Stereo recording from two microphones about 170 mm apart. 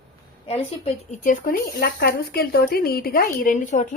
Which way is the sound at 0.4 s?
35° left (ahead or behind).